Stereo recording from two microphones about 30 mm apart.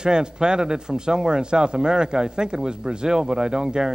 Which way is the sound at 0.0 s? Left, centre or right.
Right.